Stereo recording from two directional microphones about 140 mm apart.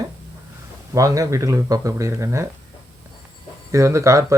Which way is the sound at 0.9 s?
25° right (ahead or behind).